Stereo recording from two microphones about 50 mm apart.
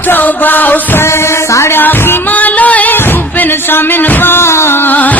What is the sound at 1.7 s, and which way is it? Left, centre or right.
Music, left.